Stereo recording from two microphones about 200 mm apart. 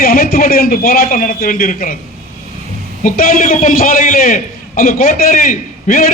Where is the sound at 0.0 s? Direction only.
45° left (ahead or behind).